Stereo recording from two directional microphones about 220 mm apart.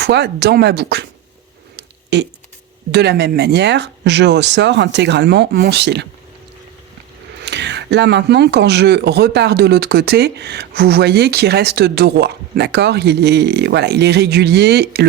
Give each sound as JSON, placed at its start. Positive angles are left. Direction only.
{"t": 0.0, "sound": "speech", "side_deg": -50}
{"t": 1.7, "sound": "a sound", "side_deg": -50}
{"t": 2.9, "sound": "speech", "side_deg": -50}
{"t": 7.4, "sound": "speech", "side_deg": -50}